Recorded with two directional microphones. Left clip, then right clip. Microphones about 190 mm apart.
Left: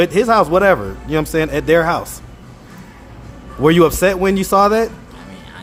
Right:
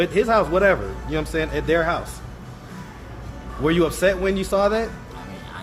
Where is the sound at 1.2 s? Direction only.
45° left (ahead or behind).